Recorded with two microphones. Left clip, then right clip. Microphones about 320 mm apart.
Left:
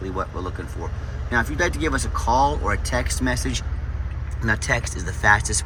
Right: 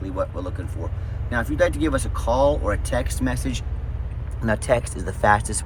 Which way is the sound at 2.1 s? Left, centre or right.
Centre.